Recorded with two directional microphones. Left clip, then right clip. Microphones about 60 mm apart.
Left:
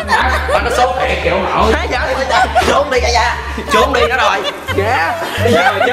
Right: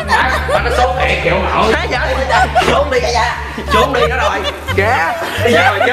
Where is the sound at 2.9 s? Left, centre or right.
Left.